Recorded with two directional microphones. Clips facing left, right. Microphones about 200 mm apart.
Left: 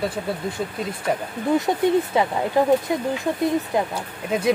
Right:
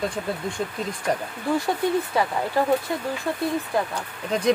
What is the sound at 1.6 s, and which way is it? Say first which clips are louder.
Speech: left 4 dB; 20° left (ahead or behind).